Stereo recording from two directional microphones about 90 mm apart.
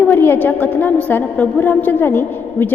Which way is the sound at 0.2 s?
25° left (ahead or behind).